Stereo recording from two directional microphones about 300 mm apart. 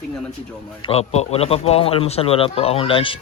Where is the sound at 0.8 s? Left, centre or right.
Centre.